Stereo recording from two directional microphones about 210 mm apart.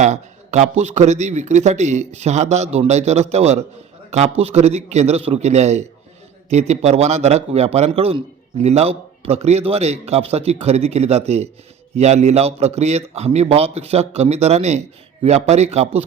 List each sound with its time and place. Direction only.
0.0 s a man's voice: 35° right (ahead or behind)